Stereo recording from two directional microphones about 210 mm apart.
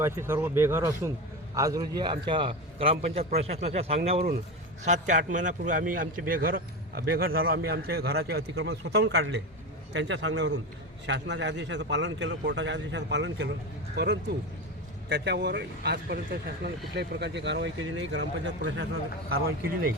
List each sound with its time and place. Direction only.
0.0 s a man's voice: 10° right (ahead or behind); by 18.9 s 55° right (ahead or behind)